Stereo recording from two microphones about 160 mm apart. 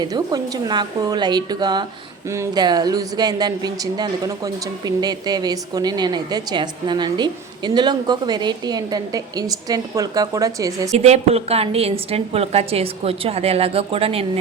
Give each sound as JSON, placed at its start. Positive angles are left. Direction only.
{"t": 0.0, "sound": "speech", "side_deg": -25}
{"t": 10.9, "sound": "a woman's voice", "side_deg": -40}